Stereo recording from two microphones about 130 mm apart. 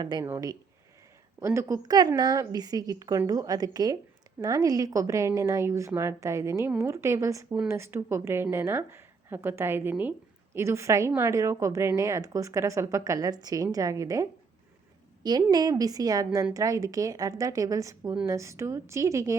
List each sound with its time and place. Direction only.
0.0 s a woman's voice: 35° right (ahead or behind)